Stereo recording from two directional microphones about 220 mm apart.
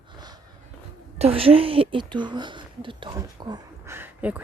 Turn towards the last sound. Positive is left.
turn(degrees=-5)  # may be behind; listen again after turning